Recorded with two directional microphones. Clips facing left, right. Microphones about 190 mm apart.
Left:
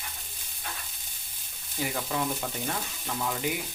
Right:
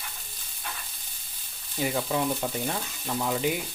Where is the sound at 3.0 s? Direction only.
25° right (ahead or behind).